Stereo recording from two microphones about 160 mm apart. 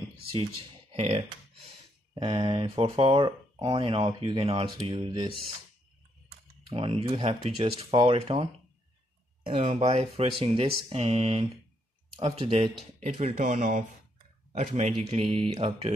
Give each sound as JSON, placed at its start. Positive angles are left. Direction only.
{"t": 0.9, "sound": "speech", "side_deg": -40}
{"t": 2.1, "sound": "speech", "side_deg": -30}
{"t": 6.6, "sound": "speech", "side_deg": -35}
{"t": 9.5, "sound": "speech", "side_deg": -35}